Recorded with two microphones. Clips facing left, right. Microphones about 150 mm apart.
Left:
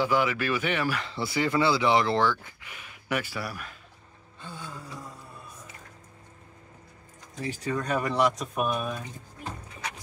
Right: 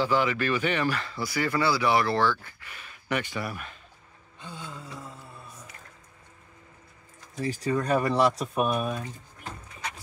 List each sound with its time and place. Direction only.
0.0 s speech: 10° left (ahead or behind)
1.1 s speech: 25° left (ahead or behind); by 3.7 s centre (ahead or behind)
4.4 s music: 20° right (ahead or behind)
7.4 s speech: 35° right (ahead or behind)